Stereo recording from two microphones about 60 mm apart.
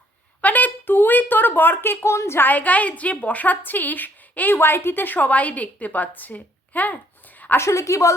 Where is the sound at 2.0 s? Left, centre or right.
Left.